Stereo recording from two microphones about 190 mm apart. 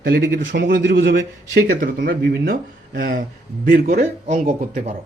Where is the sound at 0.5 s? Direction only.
55° right (ahead or behind).